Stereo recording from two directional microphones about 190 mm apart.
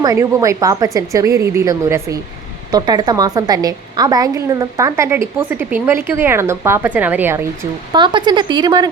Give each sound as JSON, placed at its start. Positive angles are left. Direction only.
{"t": 0.0, "sound": "a woman's voice", "side_deg": -15}
{"t": 7.9, "sound": "speech", "side_deg": -25}